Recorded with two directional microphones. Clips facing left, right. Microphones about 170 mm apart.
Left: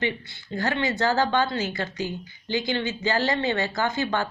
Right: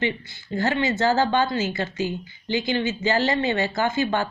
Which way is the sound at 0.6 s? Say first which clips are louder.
Right 3 dB; 20° right (ahead or behind).